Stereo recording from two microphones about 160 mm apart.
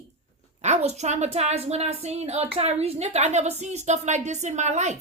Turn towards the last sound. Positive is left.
turn(degrees=-45)  # may be behind; listen again after turning